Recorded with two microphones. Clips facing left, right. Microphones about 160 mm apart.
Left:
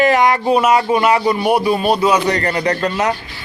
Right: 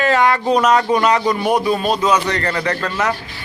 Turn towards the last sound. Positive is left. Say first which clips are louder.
# left 3 dB
turn(degrees=20)  # may be behind; listen again after turning